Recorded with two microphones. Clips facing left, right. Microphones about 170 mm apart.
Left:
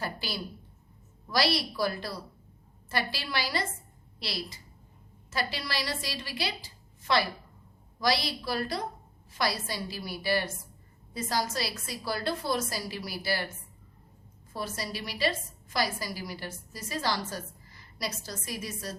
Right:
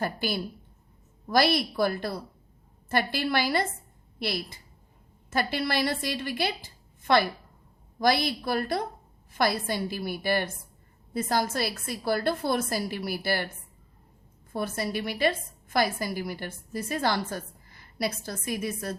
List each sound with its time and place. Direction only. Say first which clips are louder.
0.0 s a woman's voice: right 6 dB; 50° right (ahead or behind)
14.5 s a woman's voice: right 6 dB; 55° right (ahead or behind)